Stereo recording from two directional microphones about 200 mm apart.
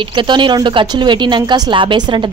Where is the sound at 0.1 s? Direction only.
25° right (ahead or behind).